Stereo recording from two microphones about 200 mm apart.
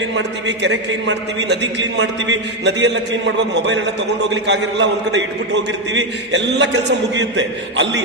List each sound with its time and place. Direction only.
0.2 s a man's voice: 60° right (ahead or behind)